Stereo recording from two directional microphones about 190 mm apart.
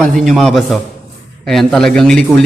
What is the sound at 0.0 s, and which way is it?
A man's voice, centre (ahead or behind).